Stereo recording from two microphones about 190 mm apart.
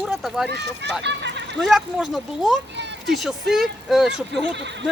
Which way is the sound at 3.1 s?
Centre (ahead or behind).